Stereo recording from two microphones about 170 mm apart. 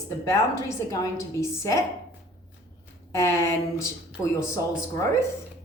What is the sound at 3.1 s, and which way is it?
Speech, 15° left (ahead or behind).